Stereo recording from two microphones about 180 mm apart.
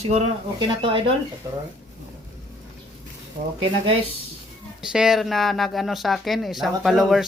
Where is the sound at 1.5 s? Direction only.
15° right (ahead or behind).